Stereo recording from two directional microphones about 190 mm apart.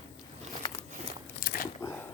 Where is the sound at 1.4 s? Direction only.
50° left (ahead or behind).